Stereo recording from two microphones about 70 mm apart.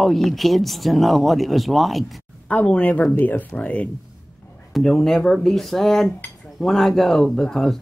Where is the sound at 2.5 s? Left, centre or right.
Centre.